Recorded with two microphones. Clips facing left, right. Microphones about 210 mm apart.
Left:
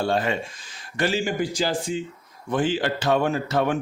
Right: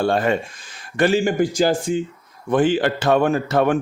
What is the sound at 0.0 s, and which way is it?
A man's voice, 55° right (ahead or behind).